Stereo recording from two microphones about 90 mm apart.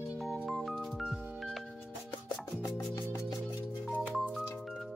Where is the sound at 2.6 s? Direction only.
35° left (ahead or behind).